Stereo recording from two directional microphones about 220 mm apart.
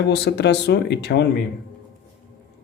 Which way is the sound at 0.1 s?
50° left (ahead or behind).